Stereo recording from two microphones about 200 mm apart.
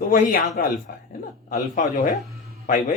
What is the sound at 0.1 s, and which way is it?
A man's voice, 45° left (ahead or behind).